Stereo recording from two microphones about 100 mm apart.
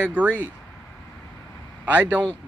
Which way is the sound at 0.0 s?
15° right (ahead or behind).